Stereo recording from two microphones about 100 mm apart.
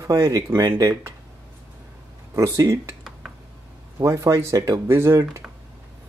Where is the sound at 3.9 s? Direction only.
30° right (ahead or behind).